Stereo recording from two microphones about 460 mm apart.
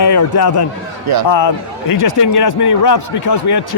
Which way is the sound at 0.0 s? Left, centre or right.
Left.